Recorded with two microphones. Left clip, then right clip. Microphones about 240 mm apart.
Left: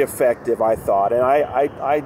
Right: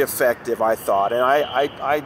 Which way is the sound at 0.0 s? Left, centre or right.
Right.